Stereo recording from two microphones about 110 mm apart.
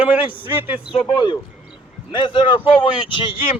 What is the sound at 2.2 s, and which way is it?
Speech, 50° left (ahead or behind).